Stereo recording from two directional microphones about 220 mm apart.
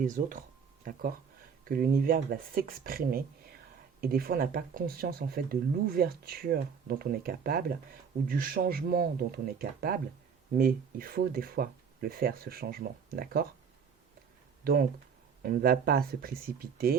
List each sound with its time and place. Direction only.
0.0 s speech: 35° right (ahead or behind)
1.6 s speech: 40° right (ahead or behind)
14.6 s speech: 45° right (ahead or behind)